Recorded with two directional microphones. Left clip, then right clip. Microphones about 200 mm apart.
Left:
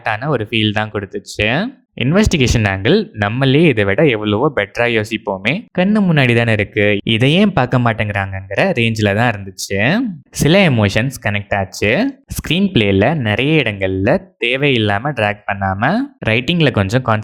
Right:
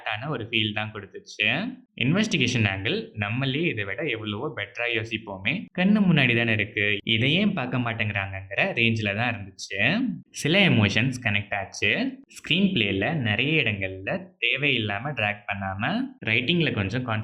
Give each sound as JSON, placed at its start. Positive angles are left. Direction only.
{"t": 0.0, "sound": "speech", "side_deg": 50}